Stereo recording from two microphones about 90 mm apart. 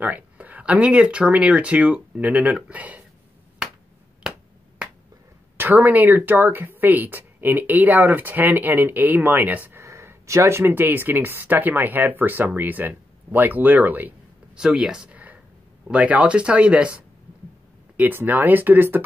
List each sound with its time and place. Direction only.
0.0 s speech: 15° right (ahead or behind)
5.6 s speech: 20° right (ahead or behind)
14.6 s speech: 10° right (ahead or behind)